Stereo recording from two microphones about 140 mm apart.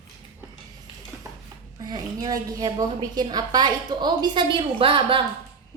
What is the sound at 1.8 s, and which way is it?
A woman's voice, 30° right (ahead or behind).